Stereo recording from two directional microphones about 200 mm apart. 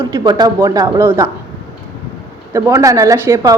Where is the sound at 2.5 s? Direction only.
15° right (ahead or behind).